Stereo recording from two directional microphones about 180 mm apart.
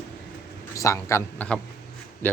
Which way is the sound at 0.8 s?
15° left (ahead or behind).